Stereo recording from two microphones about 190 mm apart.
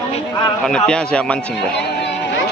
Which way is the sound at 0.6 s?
5° left (ahead or behind).